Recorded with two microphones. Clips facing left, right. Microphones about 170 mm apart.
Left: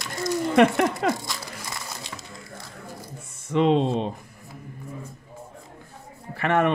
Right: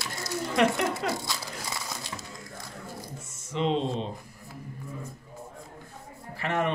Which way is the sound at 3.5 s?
60° left (ahead or behind).